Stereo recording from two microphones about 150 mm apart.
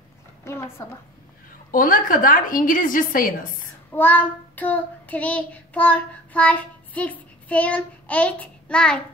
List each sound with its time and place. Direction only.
0.5 s a woman's voice: 15° left (ahead or behind)
1.7 s a woman's voice: 65° left (ahead or behind)
3.9 s child singing: 10° left (ahead or behind)